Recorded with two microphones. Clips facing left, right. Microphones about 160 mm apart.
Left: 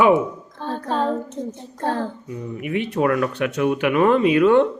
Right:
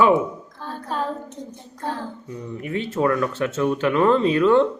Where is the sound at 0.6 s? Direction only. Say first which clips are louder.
Left 5 dB; 25° left (ahead or behind).